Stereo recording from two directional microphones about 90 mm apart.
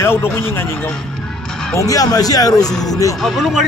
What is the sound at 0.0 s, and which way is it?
Speech, 30° left (ahead or behind).